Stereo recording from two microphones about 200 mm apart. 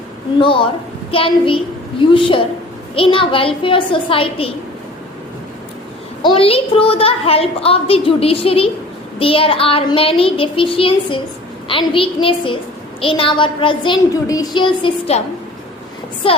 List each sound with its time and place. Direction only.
0.3 s a woman's voice: 25° left (ahead or behind)
6.2 s a woman's voice: 25° left (ahead or behind)
16.2 s a woman's voice: 25° left (ahead or behind)